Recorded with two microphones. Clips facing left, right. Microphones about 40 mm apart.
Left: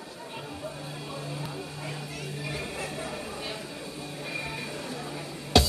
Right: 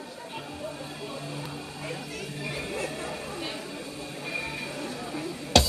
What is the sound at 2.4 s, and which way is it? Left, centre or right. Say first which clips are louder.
Music: right 3 dB; centre.